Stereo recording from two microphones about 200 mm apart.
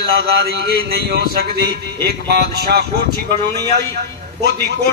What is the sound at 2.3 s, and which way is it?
Speech, 55° right (ahead or behind).